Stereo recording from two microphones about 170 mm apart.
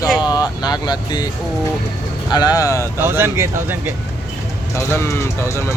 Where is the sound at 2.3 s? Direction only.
25° left (ahead or behind).